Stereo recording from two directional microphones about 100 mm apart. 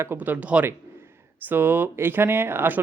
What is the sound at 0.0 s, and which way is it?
Speech, 20° right (ahead or behind).